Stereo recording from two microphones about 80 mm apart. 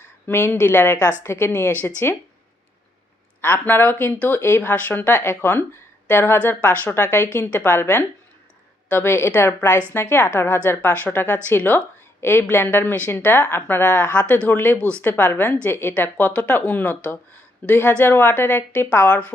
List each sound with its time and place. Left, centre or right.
0.3 s a woman's voice: left
3.4 s a woman's voice: left
4.7 s a woman's voice: left
6.4 s a woman's voice: left